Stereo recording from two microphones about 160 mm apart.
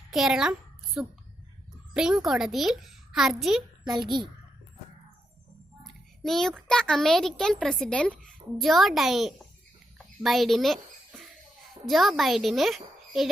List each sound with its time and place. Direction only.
0.1 s a child's voice: centre (ahead or behind)
3.9 s a child's voice: 30° right (ahead or behind)
5.8 s child singing: centre (ahead or behind)
6.7 s a child's voice: 5° left (ahead or behind)